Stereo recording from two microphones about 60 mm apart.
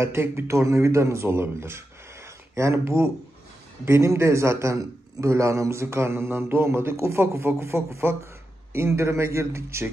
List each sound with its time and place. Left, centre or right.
0.0 s a man's voice: right
2.2 s a sound: right
3.8 s a man's voice: right